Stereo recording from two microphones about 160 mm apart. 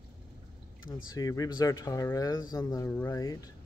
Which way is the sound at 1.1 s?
25° left (ahead or behind).